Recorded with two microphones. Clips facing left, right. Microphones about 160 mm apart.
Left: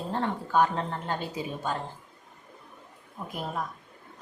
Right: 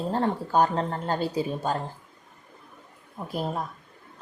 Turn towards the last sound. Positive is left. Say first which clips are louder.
# right 5 dB
turn(degrees=-35)  # may be behind; listen again after turning